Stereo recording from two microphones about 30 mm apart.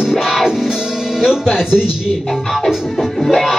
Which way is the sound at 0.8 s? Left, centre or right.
Centre.